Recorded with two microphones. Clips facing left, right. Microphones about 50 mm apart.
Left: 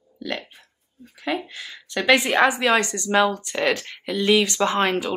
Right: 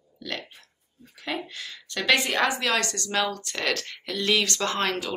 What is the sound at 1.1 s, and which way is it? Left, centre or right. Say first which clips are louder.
A woman's voice: left 5 dB; centre.